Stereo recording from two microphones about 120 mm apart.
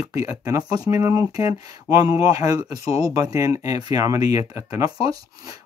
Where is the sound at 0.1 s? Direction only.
25° right (ahead or behind).